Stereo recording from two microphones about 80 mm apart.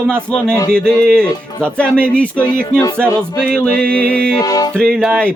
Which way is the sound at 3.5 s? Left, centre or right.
Centre.